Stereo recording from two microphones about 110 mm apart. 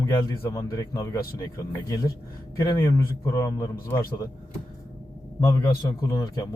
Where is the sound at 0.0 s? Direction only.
30° left (ahead or behind).